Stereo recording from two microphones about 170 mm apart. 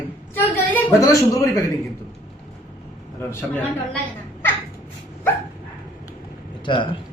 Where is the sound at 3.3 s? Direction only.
15° left (ahead or behind).